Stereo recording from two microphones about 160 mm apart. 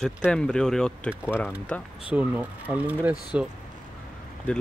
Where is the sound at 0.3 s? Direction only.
5° left (ahead or behind).